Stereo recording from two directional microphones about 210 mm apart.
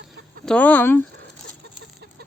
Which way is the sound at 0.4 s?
5° left (ahead or behind).